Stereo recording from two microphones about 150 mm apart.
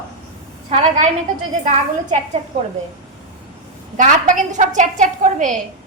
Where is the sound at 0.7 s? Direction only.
40° right (ahead or behind).